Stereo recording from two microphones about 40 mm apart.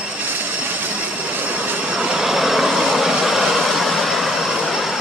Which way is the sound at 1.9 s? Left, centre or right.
Centre.